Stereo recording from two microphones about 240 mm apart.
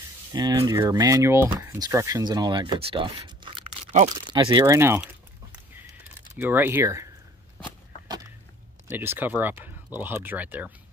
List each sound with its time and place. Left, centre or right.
0.3 s speech: centre
6.3 s speech: centre
8.8 s speech: centre